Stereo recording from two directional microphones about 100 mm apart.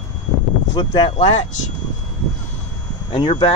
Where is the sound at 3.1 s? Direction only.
55° left (ahead or behind).